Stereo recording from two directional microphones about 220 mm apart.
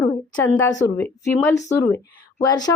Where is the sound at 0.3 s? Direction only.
10° left (ahead or behind).